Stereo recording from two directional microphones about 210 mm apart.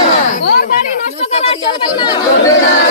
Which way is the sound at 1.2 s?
30° left (ahead or behind).